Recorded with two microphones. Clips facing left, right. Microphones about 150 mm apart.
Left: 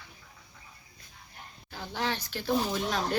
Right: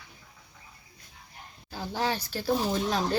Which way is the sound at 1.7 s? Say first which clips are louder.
Right 3 dB; 35° right (ahead or behind).